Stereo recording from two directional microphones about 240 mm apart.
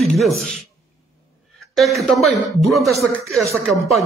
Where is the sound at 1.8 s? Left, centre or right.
Centre.